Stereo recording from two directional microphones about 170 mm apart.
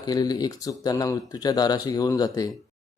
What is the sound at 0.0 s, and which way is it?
Speech, 25° left (ahead or behind).